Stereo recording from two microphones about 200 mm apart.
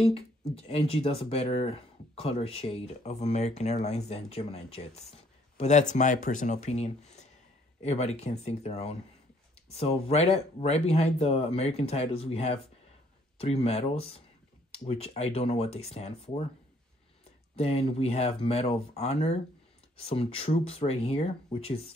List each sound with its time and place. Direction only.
0.0 s speech: 30° left (ahead or behind)
17.6 s speech: 30° left (ahead or behind)